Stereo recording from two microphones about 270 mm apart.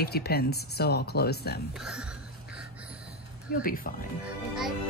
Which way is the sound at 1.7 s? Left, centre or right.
Centre.